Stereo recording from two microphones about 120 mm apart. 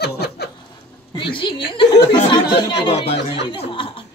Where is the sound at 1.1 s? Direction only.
45° left (ahead or behind).